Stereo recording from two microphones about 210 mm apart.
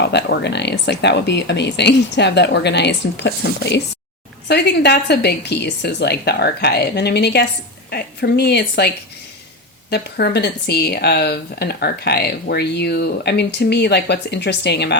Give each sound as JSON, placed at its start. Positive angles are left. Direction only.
{"t": 0.0, "sound": "speech", "side_deg": 55}
{"t": 9.9, "sound": "speech", "side_deg": 50}